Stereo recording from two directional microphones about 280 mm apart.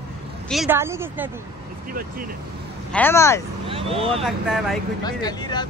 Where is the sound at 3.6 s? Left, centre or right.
Centre.